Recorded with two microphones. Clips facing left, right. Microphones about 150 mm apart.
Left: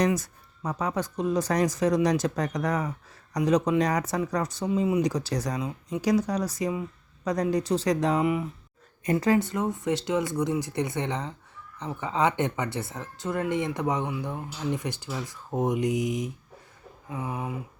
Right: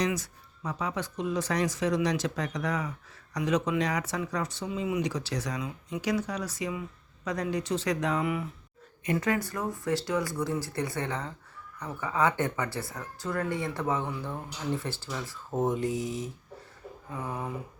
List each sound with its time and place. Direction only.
0.0 s speech: 45° left (ahead or behind); by 17.5 s 10° left (ahead or behind)